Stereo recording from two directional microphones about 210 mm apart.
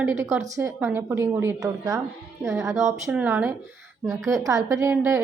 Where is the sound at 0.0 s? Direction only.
10° right (ahead or behind).